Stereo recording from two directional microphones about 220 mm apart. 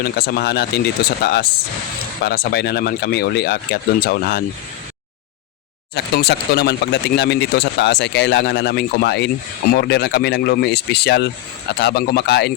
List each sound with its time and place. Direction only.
0.0 s speech: 45° left (ahead or behind)
5.9 s speech: 50° left (ahead or behind)